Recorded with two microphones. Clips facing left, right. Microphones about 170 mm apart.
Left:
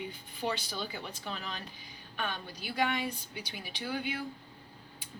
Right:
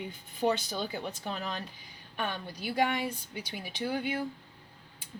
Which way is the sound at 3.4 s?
50° right (ahead or behind).